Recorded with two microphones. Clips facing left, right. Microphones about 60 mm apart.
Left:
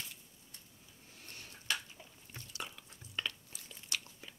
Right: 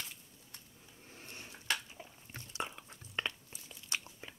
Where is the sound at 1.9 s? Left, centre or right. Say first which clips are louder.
Right 3 dB; right.